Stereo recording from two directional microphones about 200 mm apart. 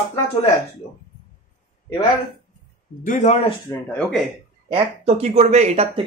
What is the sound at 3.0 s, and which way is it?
Speech, 40° left (ahead or behind).